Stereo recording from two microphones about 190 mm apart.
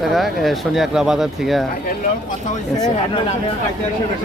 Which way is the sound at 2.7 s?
20° left (ahead or behind).